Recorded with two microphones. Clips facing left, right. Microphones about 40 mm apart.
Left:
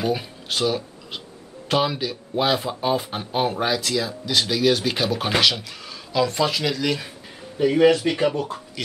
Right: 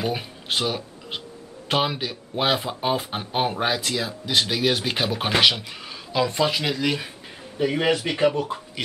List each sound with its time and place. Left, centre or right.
0.0 s speech: centre